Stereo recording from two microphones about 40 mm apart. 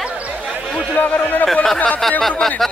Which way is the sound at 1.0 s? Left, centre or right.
Left.